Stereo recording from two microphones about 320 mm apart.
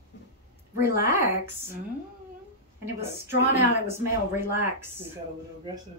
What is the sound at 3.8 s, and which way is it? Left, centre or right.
Speech, centre.